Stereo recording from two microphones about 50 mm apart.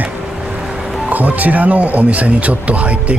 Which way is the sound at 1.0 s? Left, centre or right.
Right.